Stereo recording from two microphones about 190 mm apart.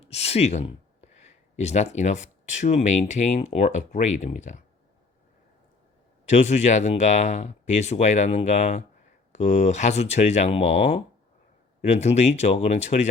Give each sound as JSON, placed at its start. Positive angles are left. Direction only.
{"t": 0.0, "sound": "speech", "side_deg": 35}
{"t": 6.2, "sound": "speech", "side_deg": 35}